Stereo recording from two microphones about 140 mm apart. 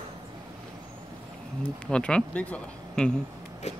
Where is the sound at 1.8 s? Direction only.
5° left (ahead or behind).